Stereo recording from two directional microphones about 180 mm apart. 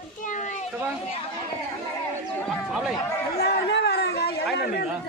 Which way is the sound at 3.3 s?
65° left (ahead or behind).